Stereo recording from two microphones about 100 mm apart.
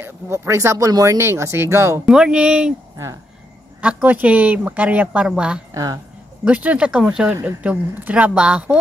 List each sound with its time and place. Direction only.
0.0 s speech: 30° right (ahead or behind)
2.0 s a woman's voice: 5° right (ahead or behind)
3.8 s a woman's voice: 15° right (ahead or behind)